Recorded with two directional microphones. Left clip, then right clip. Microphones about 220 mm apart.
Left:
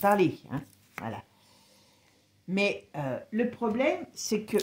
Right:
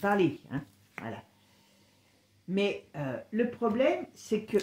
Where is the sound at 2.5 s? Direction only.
45° left (ahead or behind).